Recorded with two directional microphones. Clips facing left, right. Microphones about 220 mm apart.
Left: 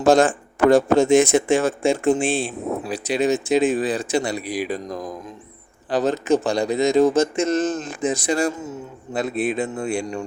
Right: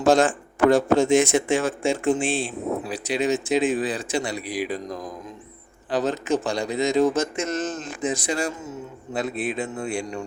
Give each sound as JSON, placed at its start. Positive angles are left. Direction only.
{"t": 0.0, "sound": "a man's voice", "side_deg": 40}
{"t": 5.9, "sound": "a man's voice", "side_deg": 35}